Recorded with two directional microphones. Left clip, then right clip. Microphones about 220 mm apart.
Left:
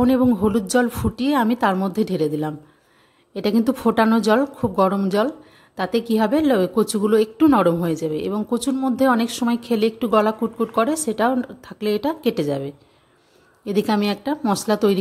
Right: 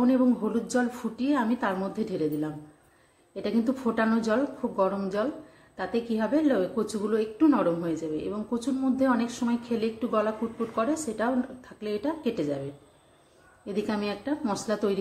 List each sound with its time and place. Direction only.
0.0 s a woman's voice: 45° left (ahead or behind)
13.7 s a woman's voice: 45° left (ahead or behind)